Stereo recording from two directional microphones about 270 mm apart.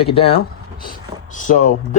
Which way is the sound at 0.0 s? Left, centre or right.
Centre.